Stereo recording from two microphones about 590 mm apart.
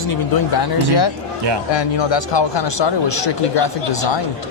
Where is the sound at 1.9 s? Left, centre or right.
Left.